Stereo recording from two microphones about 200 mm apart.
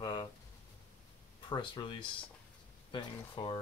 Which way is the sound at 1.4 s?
25° left (ahead or behind).